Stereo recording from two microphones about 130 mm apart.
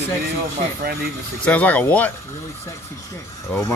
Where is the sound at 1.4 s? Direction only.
10° left (ahead or behind).